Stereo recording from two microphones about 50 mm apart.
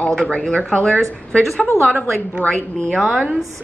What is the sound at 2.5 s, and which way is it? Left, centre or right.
Speech, centre.